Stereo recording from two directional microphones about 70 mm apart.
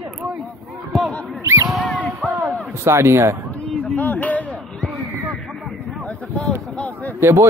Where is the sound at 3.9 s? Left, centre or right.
Left.